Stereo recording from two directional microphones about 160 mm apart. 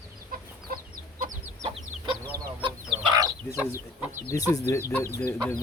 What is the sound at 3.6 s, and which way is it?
Speech, 15° right (ahead or behind).